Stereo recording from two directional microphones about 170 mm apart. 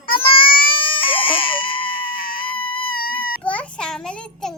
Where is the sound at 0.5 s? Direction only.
30° left (ahead or behind).